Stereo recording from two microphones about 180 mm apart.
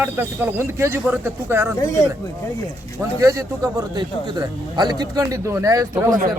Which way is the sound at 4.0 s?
25° right (ahead or behind).